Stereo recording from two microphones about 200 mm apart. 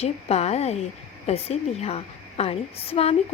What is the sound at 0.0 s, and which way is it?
A woman's voice, 30° left (ahead or behind).